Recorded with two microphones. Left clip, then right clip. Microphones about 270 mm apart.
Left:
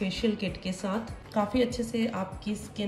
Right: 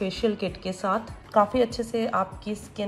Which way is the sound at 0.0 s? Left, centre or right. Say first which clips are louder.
Right 4 dB; centre.